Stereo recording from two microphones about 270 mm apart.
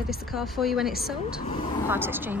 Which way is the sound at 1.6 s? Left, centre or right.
Centre.